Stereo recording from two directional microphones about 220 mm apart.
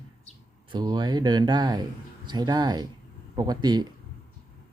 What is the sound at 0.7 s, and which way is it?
Speech, 20° right (ahead or behind).